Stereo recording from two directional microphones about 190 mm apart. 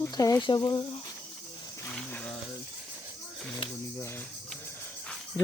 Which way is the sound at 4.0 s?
15° left (ahead or behind).